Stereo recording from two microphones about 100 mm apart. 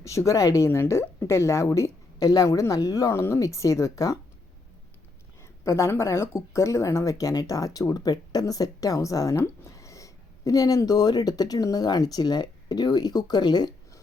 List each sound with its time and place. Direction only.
0.0 s speech: 30° left (ahead or behind)
5.4 s speech: 30° left (ahead or behind)